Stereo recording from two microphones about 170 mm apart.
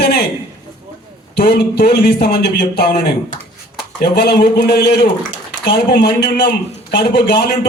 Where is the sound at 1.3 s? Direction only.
65° left (ahead or behind).